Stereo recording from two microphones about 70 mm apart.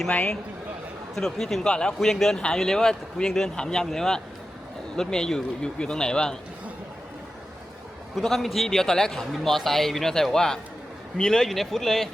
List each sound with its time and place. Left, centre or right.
0.1 s a man's voice: centre
1.1 s a man's voice: centre
8.1 s a man's voice: centre